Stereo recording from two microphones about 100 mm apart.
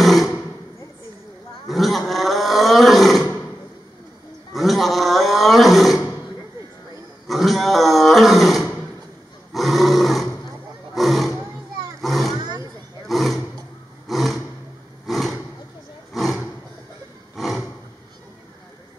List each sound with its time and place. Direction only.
0.0 s a sound: centre (ahead or behind)
1.7 s roar: centre (ahead or behind)
4.6 s roar: centre (ahead or behind)
7.2 s roar: centre (ahead or behind)
11.0 s roaring cats: centre (ahead or behind)
12.4 s roaring cats: 45° right (ahead or behind)
13.0 s roar: centre (ahead or behind)
15.0 s roaring cats: centre (ahead or behind)
17.4 s roar: centre (ahead or behind)